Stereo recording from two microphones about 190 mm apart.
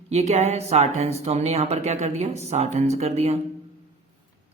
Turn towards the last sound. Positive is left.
turn(degrees=-35)  # may be behind; listen again after turning